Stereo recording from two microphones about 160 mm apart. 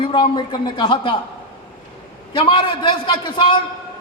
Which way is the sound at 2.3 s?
30° left (ahead or behind).